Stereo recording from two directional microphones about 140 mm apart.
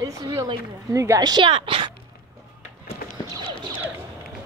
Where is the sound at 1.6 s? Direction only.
40° right (ahead or behind).